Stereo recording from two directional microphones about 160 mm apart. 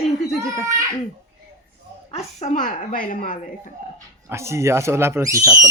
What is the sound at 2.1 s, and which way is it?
A woman's voice, 50° left (ahead or behind).